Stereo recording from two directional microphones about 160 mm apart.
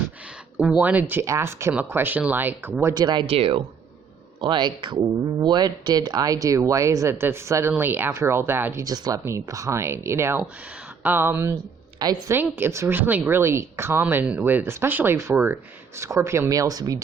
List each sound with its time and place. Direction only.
0.6 s a woman's voice: 5° right (ahead or behind)
2.9 s a woman's voice: 25° right (ahead or behind)
11.9 s speech: 25° right (ahead or behind)
12.4 s a woman's voice: 15° right (ahead or behind)